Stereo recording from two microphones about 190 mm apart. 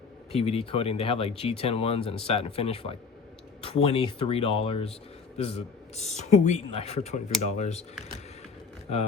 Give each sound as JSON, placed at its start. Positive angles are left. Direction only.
{"t": 0.3, "sound": "speech", "side_deg": 30}